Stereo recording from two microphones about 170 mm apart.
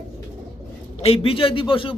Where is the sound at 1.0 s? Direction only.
35° left (ahead or behind).